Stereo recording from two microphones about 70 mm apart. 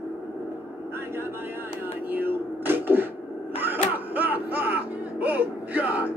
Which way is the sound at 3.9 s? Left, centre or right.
Right.